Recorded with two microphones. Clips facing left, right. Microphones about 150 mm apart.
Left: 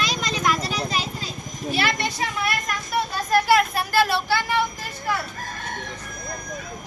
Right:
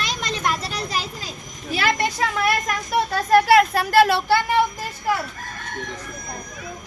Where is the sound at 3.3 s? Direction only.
70° right (ahead or behind).